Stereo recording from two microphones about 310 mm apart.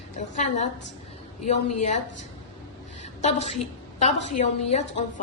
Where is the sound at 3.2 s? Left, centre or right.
Left.